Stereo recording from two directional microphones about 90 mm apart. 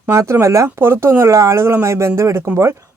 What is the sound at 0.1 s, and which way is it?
Speech, 30° right (ahead or behind).